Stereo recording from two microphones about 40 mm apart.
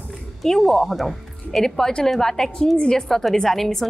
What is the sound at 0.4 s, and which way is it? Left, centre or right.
Speech, centre.